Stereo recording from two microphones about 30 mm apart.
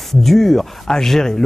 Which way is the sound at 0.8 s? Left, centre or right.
Centre.